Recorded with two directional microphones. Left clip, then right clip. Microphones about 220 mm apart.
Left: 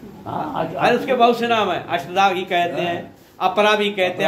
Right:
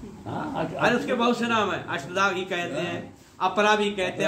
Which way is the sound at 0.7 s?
25° right (ahead or behind).